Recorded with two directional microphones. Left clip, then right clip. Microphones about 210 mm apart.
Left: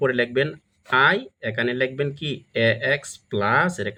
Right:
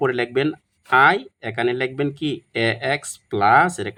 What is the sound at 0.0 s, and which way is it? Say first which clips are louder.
Speech: right 1 dB; 40° right (ahead or behind).